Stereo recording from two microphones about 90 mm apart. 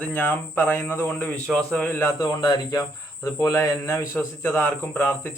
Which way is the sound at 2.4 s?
45° left (ahead or behind).